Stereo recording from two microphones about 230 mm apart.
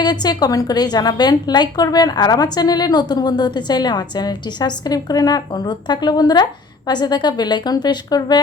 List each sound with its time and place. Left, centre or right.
0.0 s a woman's voice: centre